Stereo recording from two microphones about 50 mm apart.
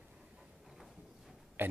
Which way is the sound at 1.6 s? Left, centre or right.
Right.